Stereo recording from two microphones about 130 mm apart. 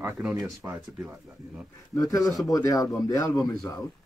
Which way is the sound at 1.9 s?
25° left (ahead or behind).